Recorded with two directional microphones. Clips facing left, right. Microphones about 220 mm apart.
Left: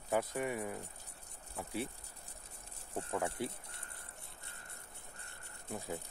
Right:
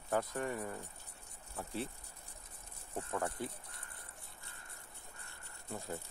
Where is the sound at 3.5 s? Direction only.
25° left (ahead or behind).